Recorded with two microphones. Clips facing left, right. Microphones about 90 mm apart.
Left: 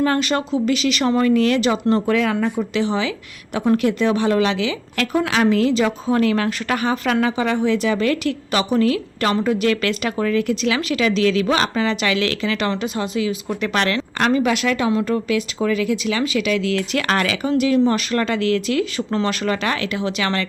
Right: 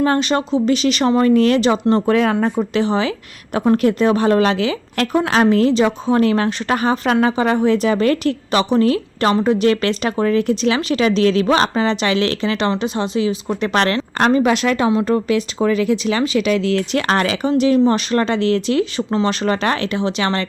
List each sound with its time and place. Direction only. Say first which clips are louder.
0.0 s speech: right 2 dB; 25° right (ahead or behind)